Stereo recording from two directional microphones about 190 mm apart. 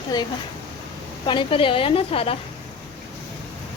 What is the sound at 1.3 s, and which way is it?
A woman's voice, 25° left (ahead or behind).